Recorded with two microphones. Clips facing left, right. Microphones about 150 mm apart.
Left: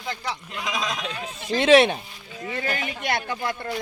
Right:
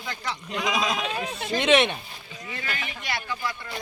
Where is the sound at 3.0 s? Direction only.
55° left (ahead or behind).